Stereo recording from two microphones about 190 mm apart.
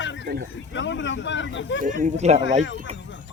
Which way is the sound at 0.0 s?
70° left (ahead or behind).